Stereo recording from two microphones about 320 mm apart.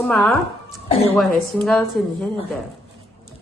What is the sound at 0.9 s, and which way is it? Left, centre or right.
Speech, centre.